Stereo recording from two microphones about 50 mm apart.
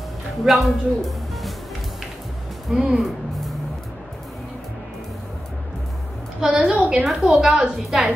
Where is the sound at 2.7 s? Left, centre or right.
Centre.